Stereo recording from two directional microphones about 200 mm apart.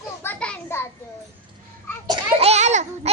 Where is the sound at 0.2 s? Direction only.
10° left (ahead or behind).